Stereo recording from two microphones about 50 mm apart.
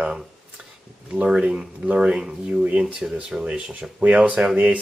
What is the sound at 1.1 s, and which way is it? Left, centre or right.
Speech, right.